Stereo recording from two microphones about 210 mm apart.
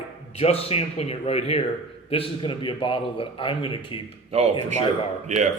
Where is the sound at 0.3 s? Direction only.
30° left (ahead or behind).